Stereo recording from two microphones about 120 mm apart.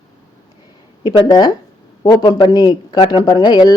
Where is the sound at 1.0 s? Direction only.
40° left (ahead or behind).